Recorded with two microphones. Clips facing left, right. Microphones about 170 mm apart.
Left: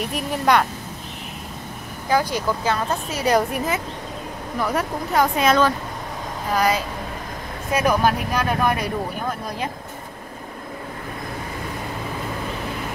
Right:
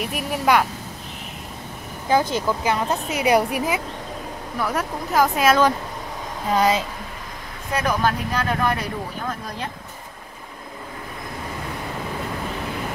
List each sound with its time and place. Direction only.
0.1 s speech: 5° right (ahead or behind)
2.0 s a woman's voice: 20° right (ahead or behind)
4.6 s speech: centre (ahead or behind)
6.5 s speech: 25° right (ahead or behind)
7.7 s speech: 10° left (ahead or behind)